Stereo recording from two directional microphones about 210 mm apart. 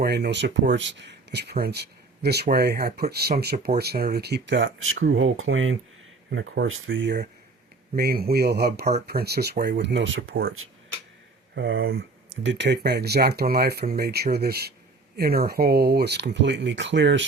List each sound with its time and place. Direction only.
0.0 s speech: 50° right (ahead or behind); by 5.7 s 70° right (ahead or behind)
6.3 s speech: 55° right (ahead or behind)
11.5 s speech: 65° right (ahead or behind)